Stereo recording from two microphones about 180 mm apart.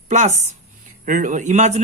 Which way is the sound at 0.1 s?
40° right (ahead or behind).